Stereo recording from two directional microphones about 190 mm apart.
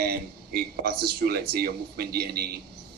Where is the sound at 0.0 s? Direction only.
55° right (ahead or behind).